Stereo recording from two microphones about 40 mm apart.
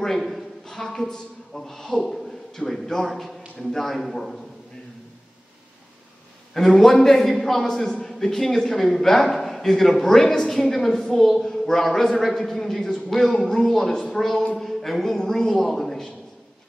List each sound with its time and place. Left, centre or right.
0.2 s a man's voice: centre
6.5 s speech: centre
7.6 s speech: centre